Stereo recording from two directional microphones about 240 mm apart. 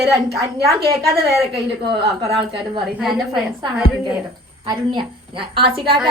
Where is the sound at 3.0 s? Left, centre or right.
Centre.